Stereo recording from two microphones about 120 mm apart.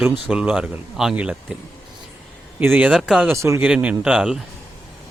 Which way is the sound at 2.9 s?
5° right (ahead or behind).